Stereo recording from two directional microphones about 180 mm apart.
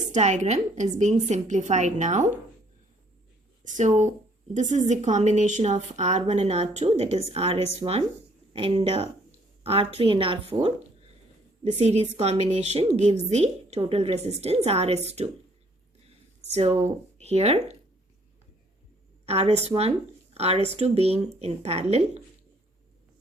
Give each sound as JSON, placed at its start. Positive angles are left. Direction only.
{"t": 0.1, "sound": "a woman's voice", "side_deg": -40}
{"t": 3.6, "sound": "a woman's voice", "side_deg": -40}
{"t": 11.8, "sound": "a woman's voice", "side_deg": -35}
{"t": 16.6, "sound": "a woman's voice", "side_deg": -35}
{"t": 19.2, "sound": "a woman's voice", "side_deg": -35}